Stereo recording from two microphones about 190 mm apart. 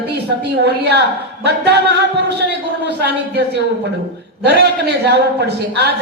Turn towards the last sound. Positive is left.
turn(degrees=-60)  # may be behind; listen again after turning